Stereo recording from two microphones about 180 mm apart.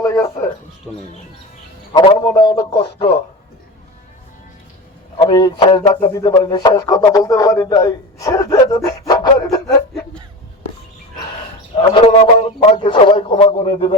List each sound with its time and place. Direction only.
0.0 s a sound: 20° left (ahead or behind)
1.9 s a man's voice: 25° left (ahead or behind)
5.1 s a man's voice: 25° left (ahead or behind)
11.8 s a man's voice: 30° left (ahead or behind)